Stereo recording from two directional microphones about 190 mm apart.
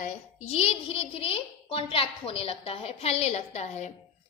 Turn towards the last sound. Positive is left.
turn(degrees=35)  # may be behind; listen again after turning